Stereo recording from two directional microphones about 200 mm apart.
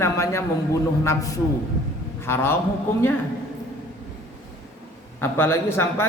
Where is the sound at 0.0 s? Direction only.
15° left (ahead or behind).